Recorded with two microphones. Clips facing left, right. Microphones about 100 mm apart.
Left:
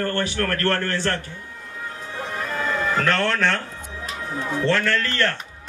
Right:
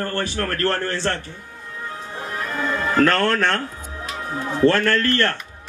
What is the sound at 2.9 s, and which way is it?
Speech, 45° right (ahead or behind).